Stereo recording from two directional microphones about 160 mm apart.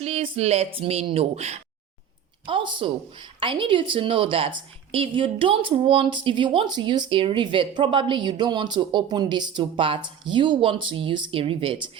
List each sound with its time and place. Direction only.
0.0 s a woman's voice: 40° right (ahead or behind)